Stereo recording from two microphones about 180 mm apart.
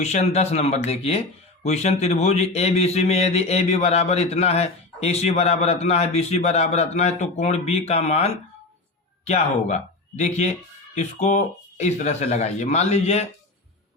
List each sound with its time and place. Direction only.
0.0 s speech: 40° left (ahead or behind)